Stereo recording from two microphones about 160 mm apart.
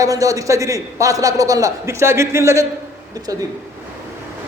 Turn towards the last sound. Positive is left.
turn(degrees=-25)  # may be behind; listen again after turning